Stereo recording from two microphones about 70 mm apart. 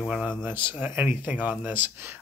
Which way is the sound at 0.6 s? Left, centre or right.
Right.